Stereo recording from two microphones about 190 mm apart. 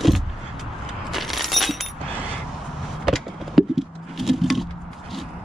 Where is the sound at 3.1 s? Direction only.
Centre (ahead or behind).